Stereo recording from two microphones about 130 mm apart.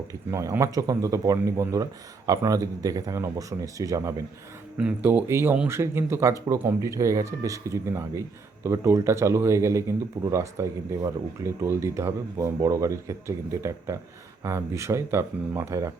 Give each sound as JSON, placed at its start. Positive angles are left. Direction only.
{"t": 0.3, "sound": "speech", "side_deg": -20}
{"t": 4.8, "sound": "speech", "side_deg": -10}